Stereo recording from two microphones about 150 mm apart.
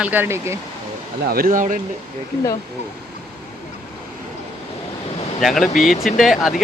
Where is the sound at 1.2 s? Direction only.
80° right; by 1.7 s 60° right (ahead or behind).